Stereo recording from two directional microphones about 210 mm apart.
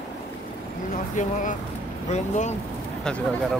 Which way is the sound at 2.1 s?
35° left (ahead or behind).